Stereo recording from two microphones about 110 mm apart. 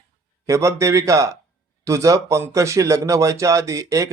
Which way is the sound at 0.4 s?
30° right (ahead or behind).